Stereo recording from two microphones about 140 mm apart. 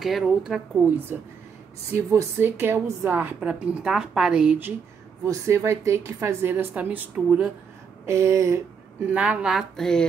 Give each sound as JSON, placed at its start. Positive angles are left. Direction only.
{"t": 0.0, "sound": "speech", "side_deg": 0}
{"t": 1.9, "sound": "a woman's voice", "side_deg": -20}
{"t": 5.2, "sound": "a woman's voice", "side_deg": -20}
{"t": 8.0, "sound": "a sound", "side_deg": -20}
{"t": 9.0, "sound": "speech", "side_deg": -10}